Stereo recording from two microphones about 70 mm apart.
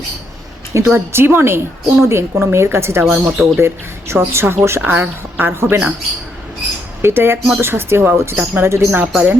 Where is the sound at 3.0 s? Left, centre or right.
Centre.